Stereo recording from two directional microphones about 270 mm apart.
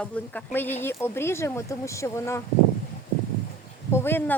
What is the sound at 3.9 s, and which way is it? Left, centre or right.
Speech, centre.